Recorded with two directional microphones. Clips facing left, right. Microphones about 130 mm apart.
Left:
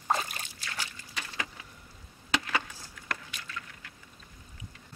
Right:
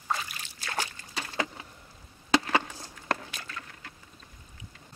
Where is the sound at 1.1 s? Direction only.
35° right (ahead or behind).